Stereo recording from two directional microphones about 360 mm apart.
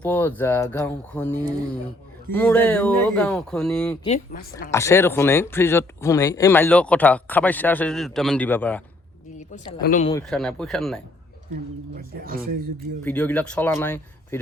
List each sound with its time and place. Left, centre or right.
0.0 s speech: centre
4.0 s speech: left
4.7 s speech: centre
9.4 s speech: centre
10.1 s speech: centre
11.9 s speech: right
13.1 s speech: centre